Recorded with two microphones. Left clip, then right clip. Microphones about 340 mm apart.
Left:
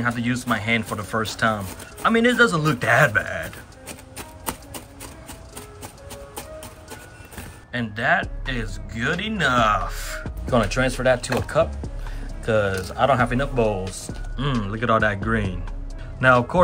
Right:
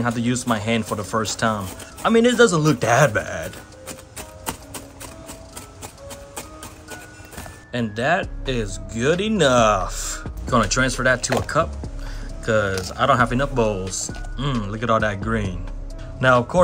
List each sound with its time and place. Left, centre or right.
0.0 s speech: centre
7.7 s speech: centre